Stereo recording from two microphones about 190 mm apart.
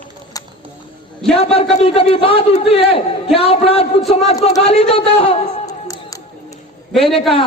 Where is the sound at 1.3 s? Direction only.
30° left (ahead or behind).